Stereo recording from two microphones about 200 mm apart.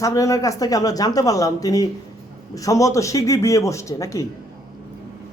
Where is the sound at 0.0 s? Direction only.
15° left (ahead or behind).